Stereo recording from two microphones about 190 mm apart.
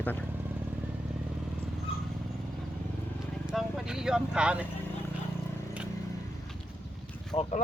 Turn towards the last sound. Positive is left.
turn(degrees=30)  # may be behind; listen again after turning